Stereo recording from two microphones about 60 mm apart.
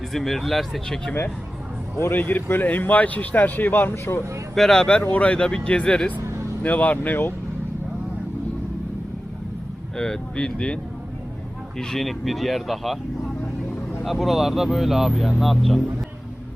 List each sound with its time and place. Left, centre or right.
0.1 s speech: centre
2.0 s speech: left
2.5 s speech: left
4.5 s speech: centre
5.0 s speech: left
6.2 s vehicle: right
6.6 s speech: left
10.0 s speech: centre
11.8 s speech: centre
14.0 s speech: centre